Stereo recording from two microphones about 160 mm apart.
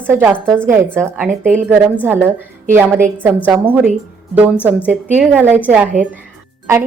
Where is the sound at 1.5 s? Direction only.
5° left (ahead or behind).